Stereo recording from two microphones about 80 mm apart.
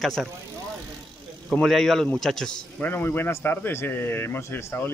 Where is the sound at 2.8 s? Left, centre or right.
Left.